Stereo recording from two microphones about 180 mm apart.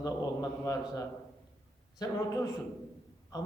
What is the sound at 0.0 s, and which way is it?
A man's voice, 20° left (ahead or behind).